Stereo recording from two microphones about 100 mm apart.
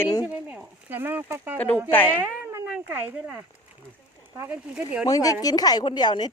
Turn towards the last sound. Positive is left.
turn(degrees=45)  # may be behind; listen again after turning